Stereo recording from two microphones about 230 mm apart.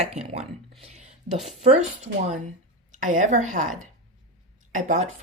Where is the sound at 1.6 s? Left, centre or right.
Right.